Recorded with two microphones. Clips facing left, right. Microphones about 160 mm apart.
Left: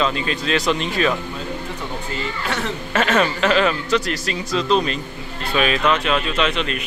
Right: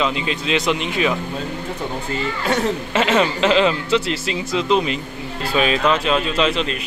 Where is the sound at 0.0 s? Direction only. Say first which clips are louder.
Even; 20° right (ahead or behind).